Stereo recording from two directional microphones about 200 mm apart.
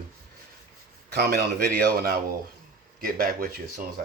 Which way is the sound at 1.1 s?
55° right (ahead or behind).